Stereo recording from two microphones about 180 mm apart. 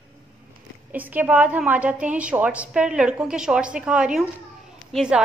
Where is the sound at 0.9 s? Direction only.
10° right (ahead or behind).